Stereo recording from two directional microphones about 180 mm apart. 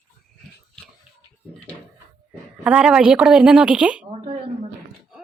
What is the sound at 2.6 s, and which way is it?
A woman's voice, 5° right (ahead or behind).